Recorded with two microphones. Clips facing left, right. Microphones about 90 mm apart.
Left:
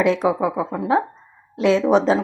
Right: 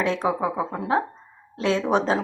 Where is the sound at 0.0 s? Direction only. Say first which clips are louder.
Left 5 dB; 15° left (ahead or behind).